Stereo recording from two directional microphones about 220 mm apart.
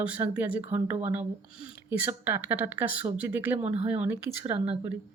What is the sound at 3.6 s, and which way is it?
Speech, 30° right (ahead or behind).